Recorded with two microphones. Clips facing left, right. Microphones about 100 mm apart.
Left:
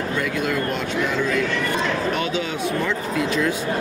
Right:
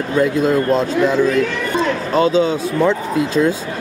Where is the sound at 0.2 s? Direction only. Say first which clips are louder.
Right 11 dB; 30° right (ahead or behind).